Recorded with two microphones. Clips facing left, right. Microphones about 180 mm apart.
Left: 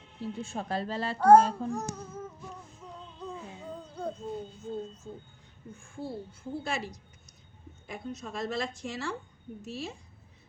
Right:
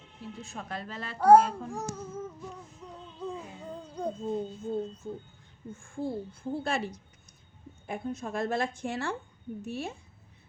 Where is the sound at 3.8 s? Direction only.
15° right (ahead or behind).